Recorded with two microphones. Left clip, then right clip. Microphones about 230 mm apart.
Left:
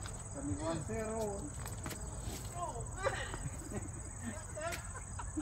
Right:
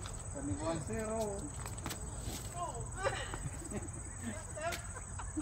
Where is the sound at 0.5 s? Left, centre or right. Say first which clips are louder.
Right 1 dB; centre.